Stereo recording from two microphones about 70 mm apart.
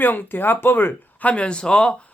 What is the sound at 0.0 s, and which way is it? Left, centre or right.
Speech, left.